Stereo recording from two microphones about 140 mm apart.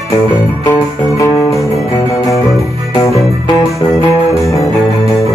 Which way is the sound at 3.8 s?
20° left (ahead or behind).